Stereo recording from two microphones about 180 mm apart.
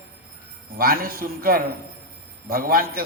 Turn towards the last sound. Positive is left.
turn(degrees=-55)  # may be behind; listen again after turning